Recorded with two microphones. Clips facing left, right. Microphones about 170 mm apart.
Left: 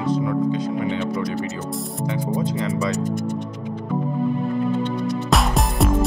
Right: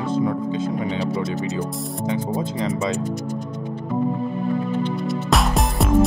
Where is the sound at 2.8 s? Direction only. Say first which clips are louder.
Left 1 dB; 45° left (ahead or behind).